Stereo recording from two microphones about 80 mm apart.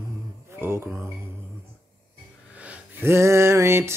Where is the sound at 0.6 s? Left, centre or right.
Right.